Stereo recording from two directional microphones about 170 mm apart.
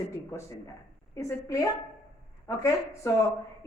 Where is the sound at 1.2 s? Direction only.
20° left (ahead or behind).